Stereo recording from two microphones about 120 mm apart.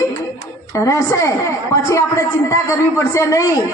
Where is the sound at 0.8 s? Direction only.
25° left (ahead or behind).